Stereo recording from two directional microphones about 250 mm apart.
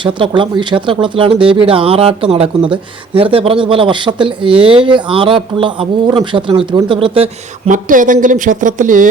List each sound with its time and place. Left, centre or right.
0.0 s speech: centre
7.7 s speech: right